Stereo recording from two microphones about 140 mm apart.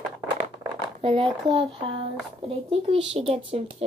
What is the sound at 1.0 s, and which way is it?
Speech, 40° right (ahead or behind).